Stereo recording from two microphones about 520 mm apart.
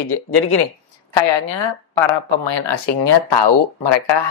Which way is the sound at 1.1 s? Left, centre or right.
Left.